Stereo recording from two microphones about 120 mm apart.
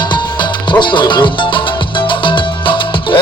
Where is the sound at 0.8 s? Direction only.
40° left (ahead or behind).